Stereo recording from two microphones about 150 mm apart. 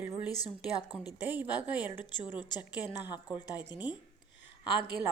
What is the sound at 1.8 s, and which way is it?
A woman's voice, 30° left (ahead or behind).